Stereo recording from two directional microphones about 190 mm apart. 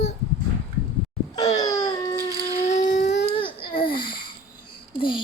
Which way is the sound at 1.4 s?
20° left (ahead or behind).